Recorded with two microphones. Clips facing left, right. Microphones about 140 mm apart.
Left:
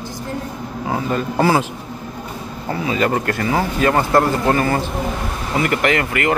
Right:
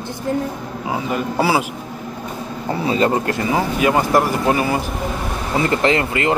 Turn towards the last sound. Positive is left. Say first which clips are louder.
# right 1 dB
turn(degrees=-25)  # may be behind; listen again after turning